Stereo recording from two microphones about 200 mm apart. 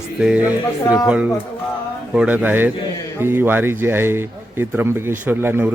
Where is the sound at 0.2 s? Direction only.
5° right (ahead or behind).